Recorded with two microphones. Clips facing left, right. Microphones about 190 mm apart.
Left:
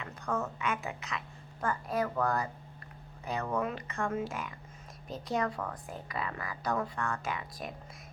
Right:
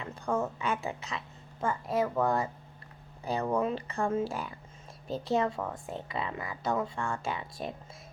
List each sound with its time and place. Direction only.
0.0 s a woman's voice: 30° right (ahead or behind)